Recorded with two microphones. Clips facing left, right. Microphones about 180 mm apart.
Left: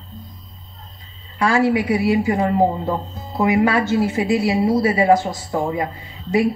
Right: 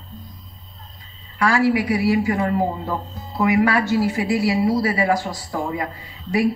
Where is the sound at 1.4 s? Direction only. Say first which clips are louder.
Left 1 dB; 25° left (ahead or behind).